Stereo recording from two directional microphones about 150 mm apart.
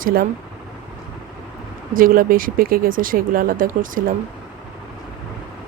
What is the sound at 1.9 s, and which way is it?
Speech, 70° right (ahead or behind).